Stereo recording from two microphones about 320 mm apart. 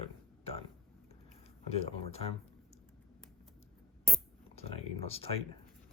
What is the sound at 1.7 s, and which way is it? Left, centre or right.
Speech, centre.